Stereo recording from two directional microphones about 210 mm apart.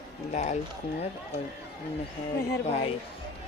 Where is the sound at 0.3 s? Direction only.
35° left (ahead or behind).